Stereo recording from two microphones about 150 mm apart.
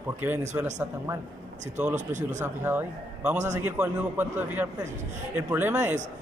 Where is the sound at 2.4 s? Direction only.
15° right (ahead or behind).